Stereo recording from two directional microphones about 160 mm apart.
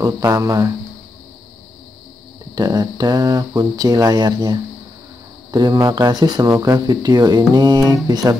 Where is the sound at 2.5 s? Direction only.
25° right (ahead or behind).